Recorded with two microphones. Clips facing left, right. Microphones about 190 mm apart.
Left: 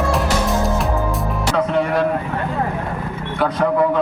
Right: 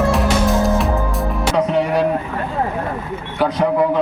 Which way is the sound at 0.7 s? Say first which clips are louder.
Right 1 dB; centre (ahead or behind).